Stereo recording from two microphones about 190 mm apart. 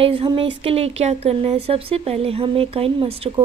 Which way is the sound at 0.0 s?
30° right (ahead or behind).